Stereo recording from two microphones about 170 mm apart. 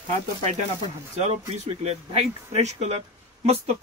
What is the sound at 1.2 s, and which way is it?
Speech, 40° right (ahead or behind).